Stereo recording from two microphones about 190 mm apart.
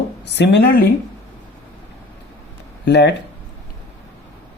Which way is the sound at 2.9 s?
65° left (ahead or behind).